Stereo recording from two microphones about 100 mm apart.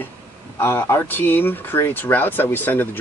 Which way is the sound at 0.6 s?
20° left (ahead or behind).